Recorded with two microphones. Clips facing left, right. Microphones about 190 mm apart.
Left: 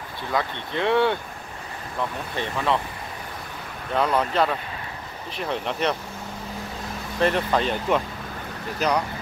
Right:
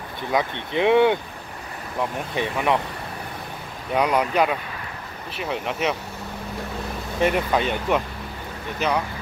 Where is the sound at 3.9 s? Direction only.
15° right (ahead or behind).